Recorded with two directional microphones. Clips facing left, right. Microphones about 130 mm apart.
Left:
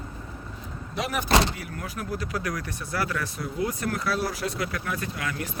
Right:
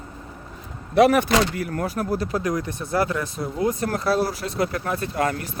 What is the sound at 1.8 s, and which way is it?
Speech, 35° right (ahead or behind).